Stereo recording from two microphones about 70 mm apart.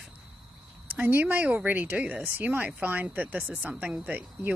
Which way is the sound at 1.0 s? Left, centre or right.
Right.